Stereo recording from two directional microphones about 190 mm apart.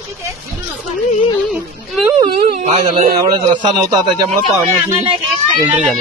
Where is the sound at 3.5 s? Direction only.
25° right (ahead or behind).